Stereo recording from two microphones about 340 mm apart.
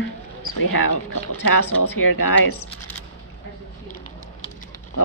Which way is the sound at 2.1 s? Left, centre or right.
Left.